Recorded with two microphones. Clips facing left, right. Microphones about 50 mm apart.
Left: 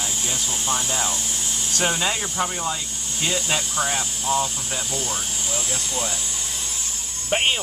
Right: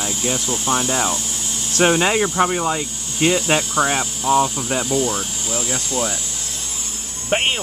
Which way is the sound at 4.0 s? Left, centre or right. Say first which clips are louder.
Right 6 dB; centre.